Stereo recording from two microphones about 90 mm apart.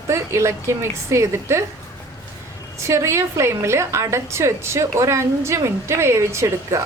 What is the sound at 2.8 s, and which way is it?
A woman's voice, 30° right (ahead or behind).